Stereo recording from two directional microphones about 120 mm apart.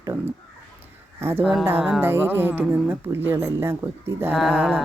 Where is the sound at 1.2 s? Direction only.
20° right (ahead or behind).